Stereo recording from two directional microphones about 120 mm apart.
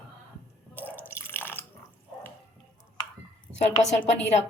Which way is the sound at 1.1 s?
20° left (ahead or behind).